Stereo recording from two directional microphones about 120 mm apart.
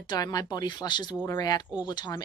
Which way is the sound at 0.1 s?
30° left (ahead or behind).